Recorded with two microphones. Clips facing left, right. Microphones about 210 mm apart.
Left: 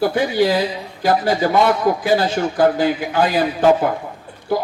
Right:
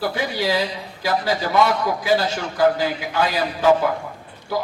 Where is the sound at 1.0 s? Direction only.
50° left (ahead or behind).